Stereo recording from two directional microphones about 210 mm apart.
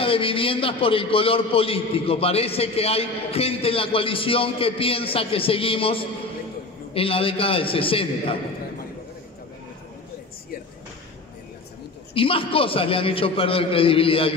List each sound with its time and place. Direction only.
0.0 s a man's voice: 25° left (ahead or behind)
12.1 s a man's voice: 25° left (ahead or behind)